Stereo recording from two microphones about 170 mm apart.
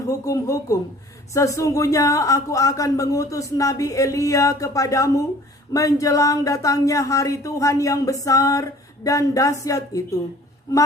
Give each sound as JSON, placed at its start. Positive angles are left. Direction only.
{"t": 0.0, "sound": "speech", "side_deg": 20}